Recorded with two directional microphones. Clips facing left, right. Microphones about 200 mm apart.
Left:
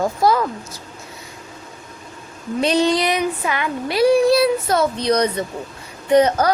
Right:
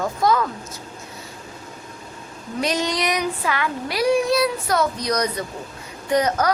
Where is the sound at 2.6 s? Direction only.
30° left (ahead or behind).